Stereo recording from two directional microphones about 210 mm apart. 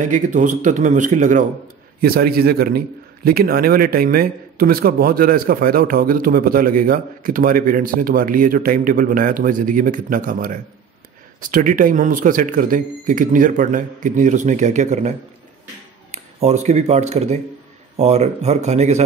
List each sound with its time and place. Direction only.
0.1 s speech: 35° right (ahead or behind)
2.0 s a man's voice: 45° right (ahead or behind)